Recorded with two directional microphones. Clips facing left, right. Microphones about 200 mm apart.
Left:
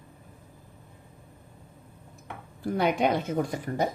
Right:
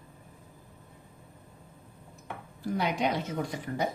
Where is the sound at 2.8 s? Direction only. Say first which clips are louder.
Left 5 dB; 55° left (ahead or behind).